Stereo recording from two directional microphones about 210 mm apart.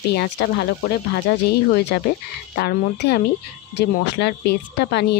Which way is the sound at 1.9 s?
50° left (ahead or behind).